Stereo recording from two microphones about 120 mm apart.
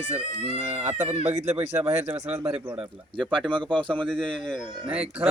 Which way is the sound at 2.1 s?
65° right (ahead or behind).